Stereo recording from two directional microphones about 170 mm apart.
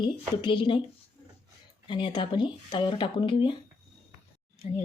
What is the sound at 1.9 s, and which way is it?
Speech, 30° left (ahead or behind).